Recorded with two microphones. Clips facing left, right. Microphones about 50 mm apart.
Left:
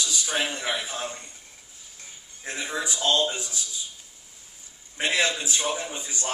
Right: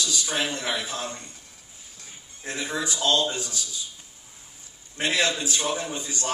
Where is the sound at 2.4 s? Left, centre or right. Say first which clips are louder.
Right 1 dB; centre.